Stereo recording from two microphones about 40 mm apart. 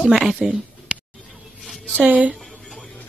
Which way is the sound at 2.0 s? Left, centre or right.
Right.